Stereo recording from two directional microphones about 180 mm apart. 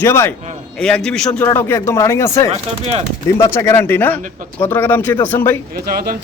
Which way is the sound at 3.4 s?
15° left (ahead or behind).